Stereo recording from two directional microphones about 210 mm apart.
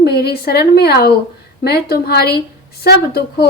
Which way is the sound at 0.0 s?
50° left (ahead or behind).